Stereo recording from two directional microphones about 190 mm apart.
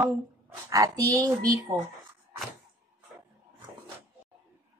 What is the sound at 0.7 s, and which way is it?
Speech, 20° right (ahead or behind).